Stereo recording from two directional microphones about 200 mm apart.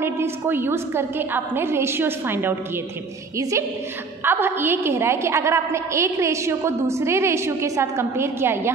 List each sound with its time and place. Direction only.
0.0 s a woman's voice: 10° right (ahead or behind)